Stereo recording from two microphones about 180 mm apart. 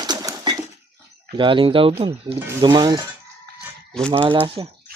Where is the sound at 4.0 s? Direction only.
5° left (ahead or behind).